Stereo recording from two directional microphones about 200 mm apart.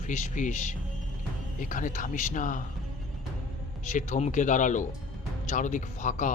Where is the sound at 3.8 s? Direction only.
35° left (ahead or behind).